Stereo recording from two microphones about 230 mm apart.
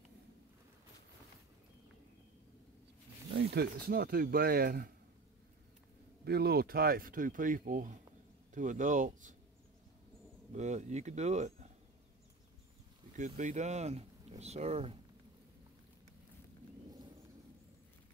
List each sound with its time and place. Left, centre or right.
3.3 s speech: right
6.2 s speech: right
10.5 s speech: right
13.1 s speech: right